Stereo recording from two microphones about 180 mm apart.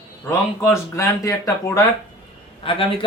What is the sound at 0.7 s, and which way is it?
Speech, 15° left (ahead or behind).